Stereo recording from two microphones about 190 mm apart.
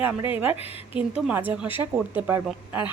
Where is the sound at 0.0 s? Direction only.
10° right (ahead or behind).